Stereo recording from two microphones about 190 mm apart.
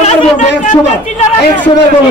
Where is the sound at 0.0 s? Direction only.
35° left (ahead or behind).